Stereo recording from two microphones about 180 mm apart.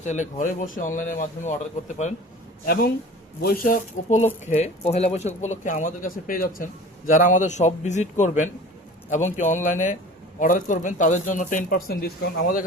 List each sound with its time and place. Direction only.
0.0 s speech: 40° left (ahead or behind)
3.4 s speech: 55° left (ahead or behind)
4.4 s speech: 35° left (ahead or behind); by 12.6 s 55° left (ahead or behind)